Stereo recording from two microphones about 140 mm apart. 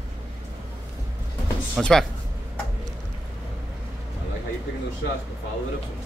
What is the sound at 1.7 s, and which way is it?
Speech, 5° left (ahead or behind).